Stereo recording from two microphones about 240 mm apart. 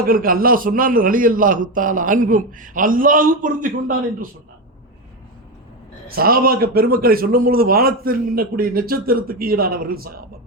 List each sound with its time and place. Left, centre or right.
0.0 s a man's voice: right
6.1 s a man's voice: right